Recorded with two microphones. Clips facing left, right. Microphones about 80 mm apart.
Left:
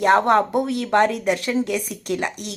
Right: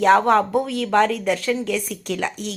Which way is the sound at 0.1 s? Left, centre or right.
Centre.